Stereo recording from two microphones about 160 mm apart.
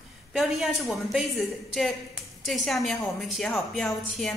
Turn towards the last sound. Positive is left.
turn(degrees=0)  # may be behind; listen again after turning